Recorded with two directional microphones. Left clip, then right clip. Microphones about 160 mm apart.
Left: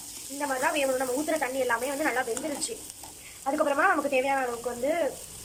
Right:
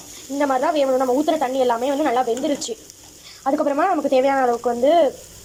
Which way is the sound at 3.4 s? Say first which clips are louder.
Right 5 dB; 25° right (ahead or behind).